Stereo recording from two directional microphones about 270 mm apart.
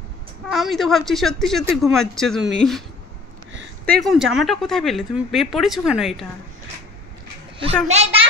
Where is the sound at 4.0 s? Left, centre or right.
Centre.